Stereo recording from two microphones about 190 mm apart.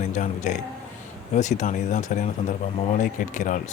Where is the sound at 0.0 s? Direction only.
40° left (ahead or behind).